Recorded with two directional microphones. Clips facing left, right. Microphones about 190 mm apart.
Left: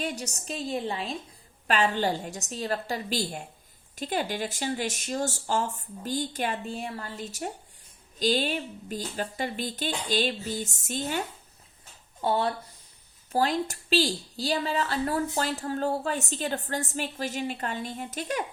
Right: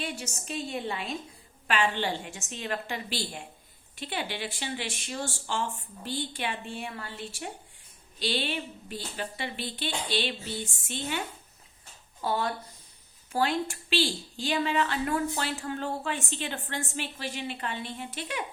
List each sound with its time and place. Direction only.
0.0 s a woman's voice: 40° left (ahead or behind)
12.2 s a woman's voice: 30° left (ahead or behind)